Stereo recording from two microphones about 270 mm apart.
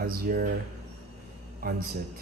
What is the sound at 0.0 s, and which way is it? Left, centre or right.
Speech, right.